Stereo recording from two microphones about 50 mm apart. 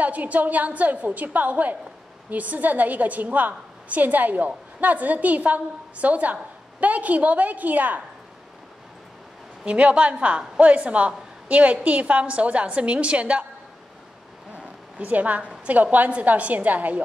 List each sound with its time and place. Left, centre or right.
0.0 s a woman's voice: right
9.7 s a woman's voice: right
14.5 s a woman's voice: right